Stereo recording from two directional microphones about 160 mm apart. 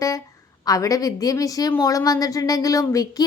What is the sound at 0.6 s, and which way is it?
Speech, 20° left (ahead or behind).